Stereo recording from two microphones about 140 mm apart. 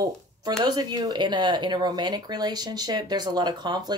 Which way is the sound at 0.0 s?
30° right (ahead or behind).